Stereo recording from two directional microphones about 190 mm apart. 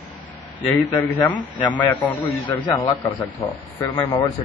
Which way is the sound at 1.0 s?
10° left (ahead or behind).